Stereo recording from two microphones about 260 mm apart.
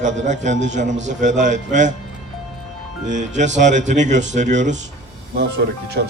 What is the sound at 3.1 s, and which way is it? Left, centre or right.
Speech, right.